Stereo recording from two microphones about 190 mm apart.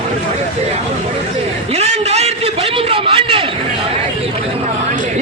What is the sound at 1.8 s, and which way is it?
A man's voice, 35° right (ahead or behind).